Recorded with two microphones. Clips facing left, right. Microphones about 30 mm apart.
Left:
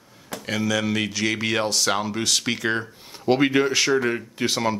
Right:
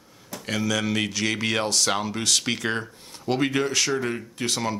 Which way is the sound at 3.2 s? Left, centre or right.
Centre.